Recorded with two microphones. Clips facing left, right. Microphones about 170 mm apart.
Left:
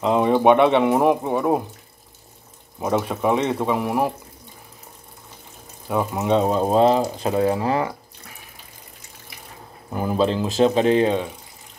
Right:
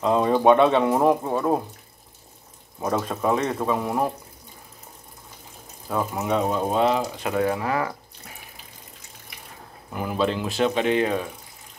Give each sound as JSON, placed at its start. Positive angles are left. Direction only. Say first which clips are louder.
{"t": 0.0, "sound": "speech", "louder": "left 2 dB", "side_deg": 15}
{"t": 2.8, "sound": "speech", "louder": "left 3 dB", "side_deg": 20}
{"t": 5.9, "sound": "speech", "louder": "left 4 dB", "side_deg": 20}
{"t": 9.8, "sound": "speech", "louder": "left 4 dB", "side_deg": 35}